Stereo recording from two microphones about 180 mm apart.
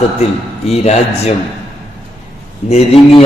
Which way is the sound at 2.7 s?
35° left (ahead or behind).